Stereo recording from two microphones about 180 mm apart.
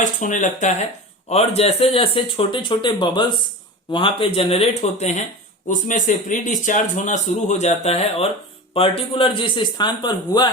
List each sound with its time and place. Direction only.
0.0 s speech: 45° left (ahead or behind); by 10.5 s 25° left (ahead or behind)